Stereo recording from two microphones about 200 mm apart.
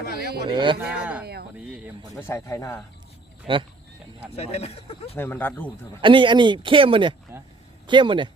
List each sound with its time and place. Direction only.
0.4 s speech: 25° right (ahead or behind)
0.9 s speech: 5° right (ahead or behind)
1.2 s speech: 55° right (ahead or behind)
1.5 s speech: 5° right (ahead or behind)
2.2 s speech: 15° left (ahead or behind)
3.4 s speech: 25° right (ahead or behind)
4.4 s speech: 30° left (ahead or behind)
5.1 s speech: 10° left (ahead or behind)
6.0 s speech: 25° right (ahead or behind)